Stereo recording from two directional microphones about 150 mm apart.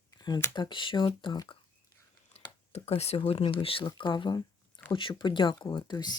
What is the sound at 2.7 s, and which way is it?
Speech, 45° left (ahead or behind).